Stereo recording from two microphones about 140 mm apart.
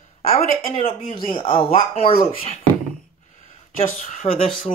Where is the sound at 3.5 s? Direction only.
50° left (ahead or behind).